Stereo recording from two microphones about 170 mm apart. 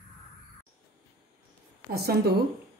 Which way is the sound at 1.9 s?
65° right (ahead or behind).